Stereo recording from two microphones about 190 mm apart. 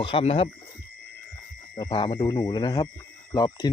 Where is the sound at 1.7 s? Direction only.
25° left (ahead or behind).